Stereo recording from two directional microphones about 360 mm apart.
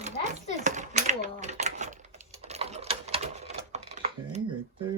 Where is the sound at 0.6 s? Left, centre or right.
Centre.